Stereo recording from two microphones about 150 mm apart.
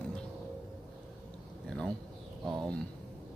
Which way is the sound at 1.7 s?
5° left (ahead or behind).